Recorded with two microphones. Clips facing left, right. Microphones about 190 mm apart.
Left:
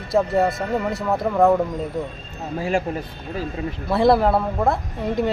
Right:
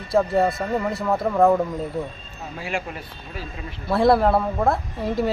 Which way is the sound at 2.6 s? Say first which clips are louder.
Left 6 dB; 40° left (ahead or behind).